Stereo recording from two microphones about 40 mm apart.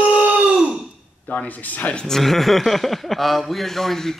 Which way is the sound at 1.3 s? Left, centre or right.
Left.